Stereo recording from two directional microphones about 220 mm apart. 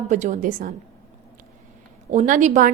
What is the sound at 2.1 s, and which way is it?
Speech, 35° right (ahead or behind).